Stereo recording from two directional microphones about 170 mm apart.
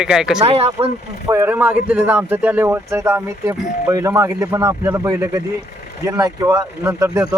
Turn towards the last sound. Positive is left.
turn(degrees=-20)  # may be behind; listen again after turning